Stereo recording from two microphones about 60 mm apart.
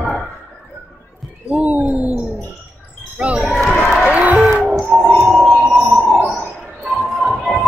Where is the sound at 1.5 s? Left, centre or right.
Right.